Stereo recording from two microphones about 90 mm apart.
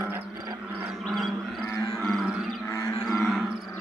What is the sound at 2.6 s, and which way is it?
Livestock, 30° left (ahead or behind).